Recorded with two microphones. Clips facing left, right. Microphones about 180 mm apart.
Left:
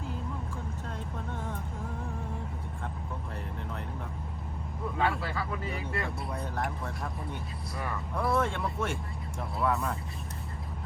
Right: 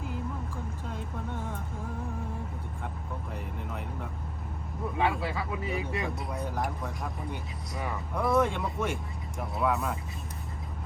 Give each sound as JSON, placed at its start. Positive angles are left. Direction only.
{"t": 4.9, "sound": "speech", "side_deg": -15}
{"t": 6.3, "sound": "speech", "side_deg": -10}
{"t": 7.8, "sound": "speech", "side_deg": -20}
{"t": 9.6, "sound": "speech", "side_deg": -5}